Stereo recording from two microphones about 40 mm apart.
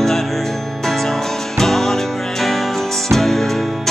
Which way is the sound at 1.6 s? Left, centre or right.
Centre.